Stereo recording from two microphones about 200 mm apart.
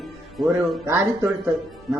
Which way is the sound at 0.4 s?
15° right (ahead or behind).